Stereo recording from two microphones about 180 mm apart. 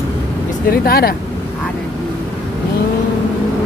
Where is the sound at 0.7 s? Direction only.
55° left (ahead or behind).